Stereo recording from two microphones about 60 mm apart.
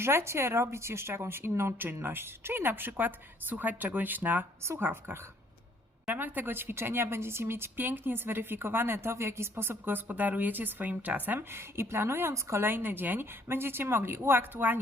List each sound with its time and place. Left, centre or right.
0.0 s speech: right
4.6 s speech: right
11.3 s speech: right